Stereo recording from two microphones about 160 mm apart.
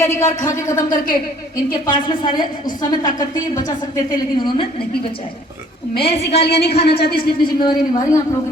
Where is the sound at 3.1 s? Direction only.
55° left (ahead or behind).